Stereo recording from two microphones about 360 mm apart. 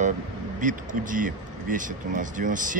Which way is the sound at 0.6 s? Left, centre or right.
Right.